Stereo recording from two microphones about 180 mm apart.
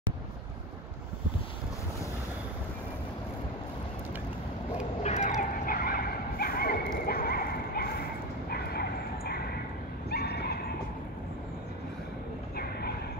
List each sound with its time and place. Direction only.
5.0 s a sound: 40° left (ahead or behind); by 7.9 s 60° left (ahead or behind)
8.5 s bow-wow: 60° left (ahead or behind)
10.0 s horse: 65° left (ahead or behind)